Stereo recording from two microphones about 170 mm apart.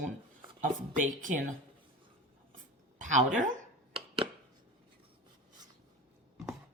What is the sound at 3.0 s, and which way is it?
Speech, 45° right (ahead or behind).